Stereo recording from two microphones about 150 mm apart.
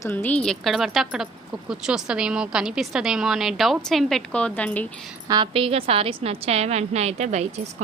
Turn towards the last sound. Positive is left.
turn(degrees=-50)  # may be behind; listen again after turning